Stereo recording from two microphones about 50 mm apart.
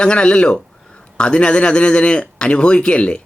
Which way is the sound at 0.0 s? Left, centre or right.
Centre.